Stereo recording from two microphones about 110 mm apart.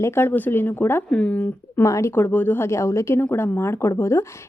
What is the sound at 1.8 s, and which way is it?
A woman's voice, 25° left (ahead or behind).